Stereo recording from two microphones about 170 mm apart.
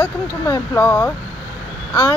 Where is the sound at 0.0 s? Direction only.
10° left (ahead or behind).